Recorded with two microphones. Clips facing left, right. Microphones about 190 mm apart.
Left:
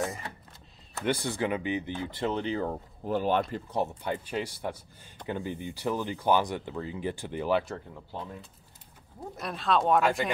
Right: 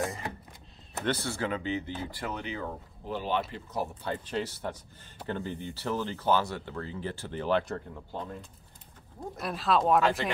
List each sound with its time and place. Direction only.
1.0 s speech: 15° left (ahead or behind); by 3.2 s 35° left (ahead or behind)
3.2 s speech: 50° left (ahead or behind)
3.9 s speech: 10° left (ahead or behind)